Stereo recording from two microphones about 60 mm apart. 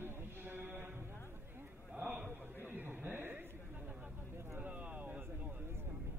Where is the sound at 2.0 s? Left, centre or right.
Right.